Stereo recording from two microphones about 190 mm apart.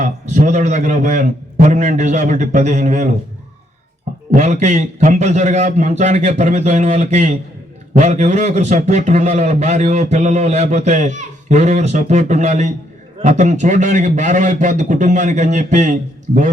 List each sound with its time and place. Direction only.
0.0 s a man's voice: 40° right (ahead or behind)
4.4 s a man's voice: 35° right (ahead or behind)